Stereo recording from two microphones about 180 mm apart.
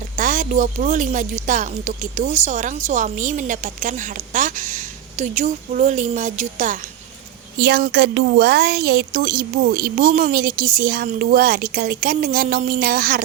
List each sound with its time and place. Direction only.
0.2 s a woman's voice: 45° right (ahead or behind)
7.6 s a woman's voice: 65° right (ahead or behind)